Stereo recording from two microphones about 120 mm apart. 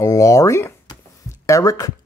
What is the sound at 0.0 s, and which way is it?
Speech, 25° left (ahead or behind).